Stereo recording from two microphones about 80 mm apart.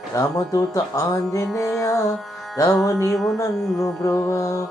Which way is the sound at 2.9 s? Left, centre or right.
Left.